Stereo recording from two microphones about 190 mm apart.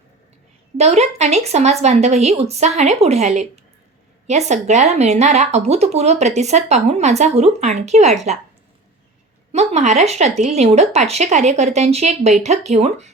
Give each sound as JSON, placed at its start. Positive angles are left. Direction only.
{"t": 0.8, "sound": "a woman's voice", "side_deg": -35}
{"t": 9.5, "sound": "a woman's voice", "side_deg": -35}